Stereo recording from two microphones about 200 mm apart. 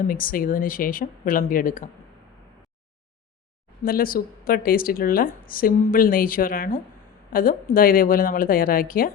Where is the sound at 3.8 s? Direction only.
45° left (ahead or behind).